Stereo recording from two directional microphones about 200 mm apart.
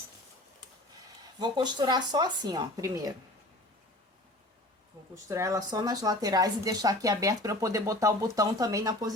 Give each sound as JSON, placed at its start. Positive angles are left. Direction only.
{"t": 1.4, "sound": "speech", "side_deg": -20}
{"t": 5.1, "sound": "a woman's voice", "side_deg": -15}